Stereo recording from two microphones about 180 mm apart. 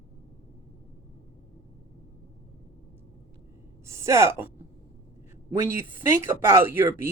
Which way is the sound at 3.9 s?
15° right (ahead or behind).